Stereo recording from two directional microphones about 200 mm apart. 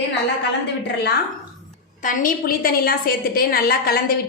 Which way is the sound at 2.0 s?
45° left (ahead or behind).